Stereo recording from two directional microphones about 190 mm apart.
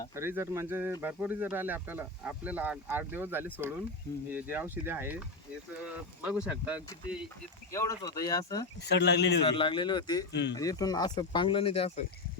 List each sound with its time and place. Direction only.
0.2 s speech: 10° right (ahead or behind)
7.7 s speech: 15° left (ahead or behind)
8.9 s speech: 60° left (ahead or behind)
9.4 s speech: 25° left (ahead or behind)